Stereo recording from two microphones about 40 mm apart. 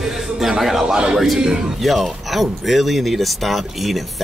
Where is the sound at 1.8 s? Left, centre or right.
Centre.